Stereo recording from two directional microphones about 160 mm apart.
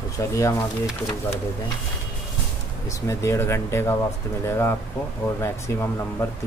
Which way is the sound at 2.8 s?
20° left (ahead or behind).